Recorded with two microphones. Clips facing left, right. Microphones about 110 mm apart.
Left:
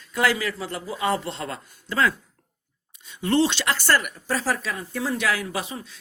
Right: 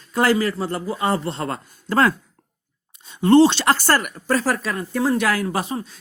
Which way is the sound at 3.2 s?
35° right (ahead or behind).